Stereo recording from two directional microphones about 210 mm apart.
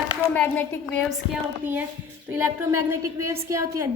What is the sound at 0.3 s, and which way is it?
A woman's voice, 5° left (ahead or behind).